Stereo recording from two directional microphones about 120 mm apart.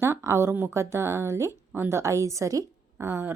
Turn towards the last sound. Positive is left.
turn(degrees=-20)  # may be behind; listen again after turning